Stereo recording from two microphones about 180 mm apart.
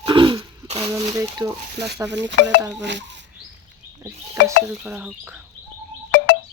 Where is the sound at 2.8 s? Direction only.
75° right (ahead or behind).